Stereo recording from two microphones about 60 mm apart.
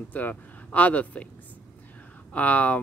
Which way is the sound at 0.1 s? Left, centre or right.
Left.